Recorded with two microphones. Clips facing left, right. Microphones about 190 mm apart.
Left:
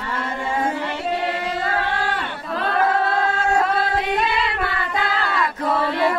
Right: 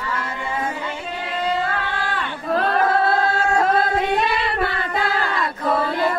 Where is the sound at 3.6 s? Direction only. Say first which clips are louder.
Right 3 dB; 50° right (ahead or behind).